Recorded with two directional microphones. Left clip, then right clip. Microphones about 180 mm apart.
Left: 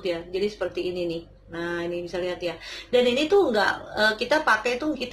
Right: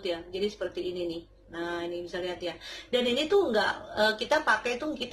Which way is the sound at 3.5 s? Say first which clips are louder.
Left 4 dB; 15° right (ahead or behind).